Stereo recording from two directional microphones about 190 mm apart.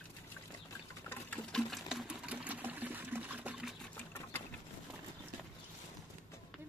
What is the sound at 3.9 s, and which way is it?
Sewing machine, 10° left (ahead or behind).